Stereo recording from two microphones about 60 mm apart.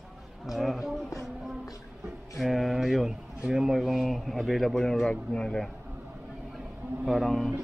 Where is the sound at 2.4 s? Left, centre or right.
Centre.